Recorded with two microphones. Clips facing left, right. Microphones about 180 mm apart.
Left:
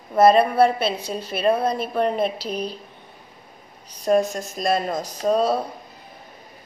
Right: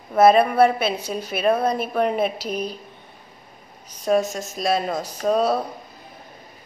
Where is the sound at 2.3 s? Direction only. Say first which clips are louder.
Right 1 dB; 30° left (ahead or behind).